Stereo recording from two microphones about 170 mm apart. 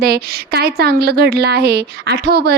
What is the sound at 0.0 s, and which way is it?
A woman's voice, 65° right (ahead or behind).